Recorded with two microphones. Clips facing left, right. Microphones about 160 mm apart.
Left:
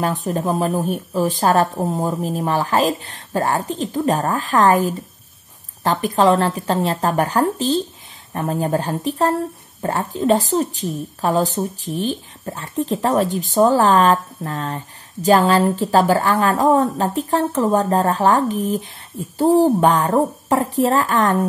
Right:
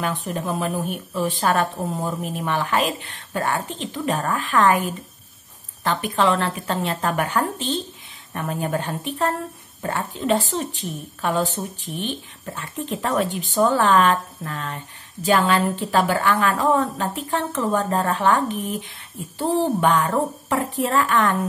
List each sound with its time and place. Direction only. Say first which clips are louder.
0.0 s a woman's voice: left 5 dB; 40° left (ahead or behind)